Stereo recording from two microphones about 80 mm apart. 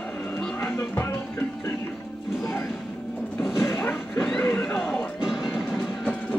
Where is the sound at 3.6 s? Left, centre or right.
Centre.